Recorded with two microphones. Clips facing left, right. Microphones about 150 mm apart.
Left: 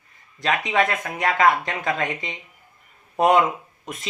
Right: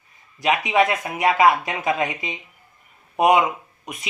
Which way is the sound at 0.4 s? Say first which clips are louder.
Right 3 dB; 20° right (ahead or behind).